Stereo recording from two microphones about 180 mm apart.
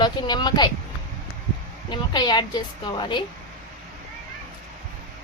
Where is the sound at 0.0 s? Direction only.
25° left (ahead or behind).